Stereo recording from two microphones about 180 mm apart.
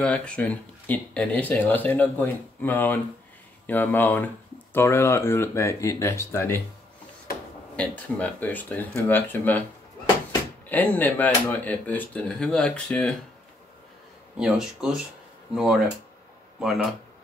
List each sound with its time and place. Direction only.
0.0 s speech: 5° left (ahead or behind)
7.7 s speech: 5° left (ahead or behind)
10.7 s speech: 10° left (ahead or behind)
14.3 s speech: 5° right (ahead or behind)